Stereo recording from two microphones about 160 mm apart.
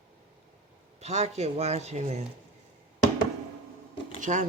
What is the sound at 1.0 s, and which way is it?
Speech, 40° right (ahead or behind).